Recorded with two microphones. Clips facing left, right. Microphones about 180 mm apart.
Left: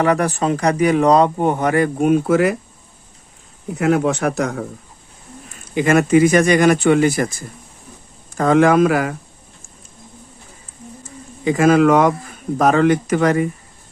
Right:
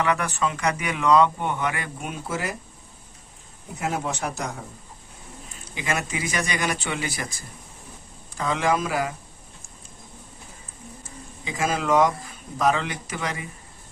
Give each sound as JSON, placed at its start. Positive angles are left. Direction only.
{"t": 0.0, "sound": "speech", "side_deg": 40}
{"t": 3.8, "sound": "speech", "side_deg": 70}
{"t": 5.7, "sound": "speech", "side_deg": 55}
{"t": 8.4, "sound": "speech", "side_deg": 50}
{"t": 11.4, "sound": "speech", "side_deg": 60}